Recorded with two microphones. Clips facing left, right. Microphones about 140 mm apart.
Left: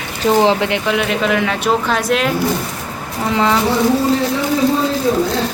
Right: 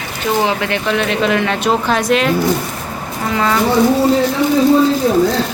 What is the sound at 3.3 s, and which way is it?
Speech, 20° left (ahead or behind).